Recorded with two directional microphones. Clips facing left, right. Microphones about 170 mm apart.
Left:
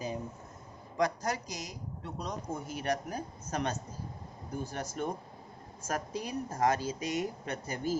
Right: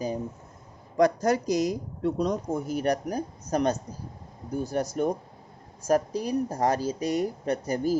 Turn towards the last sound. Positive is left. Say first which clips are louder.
# right 10 dB
turn(degrees=-35)  # may be behind; listen again after turning